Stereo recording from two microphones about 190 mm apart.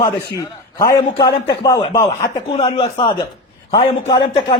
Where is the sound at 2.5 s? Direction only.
30° left (ahead or behind).